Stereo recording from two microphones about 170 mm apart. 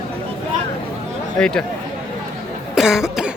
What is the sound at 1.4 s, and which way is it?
Speech, 5° left (ahead or behind).